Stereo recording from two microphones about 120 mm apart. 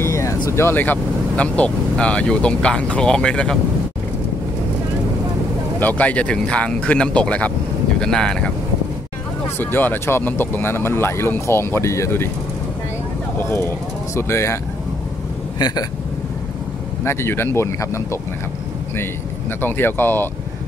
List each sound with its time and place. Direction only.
0.0 s speech: 25° left (ahead or behind); by 3.5 s 5° left (ahead or behind)
5.8 s speech: 15° left (ahead or behind)
9.6 s speech: 15° left (ahead or behind)
13.4 s speech: 20° left (ahead or behind)
17.0 s speech: 20° left (ahead or behind)
19.6 s speech: 15° left (ahead or behind)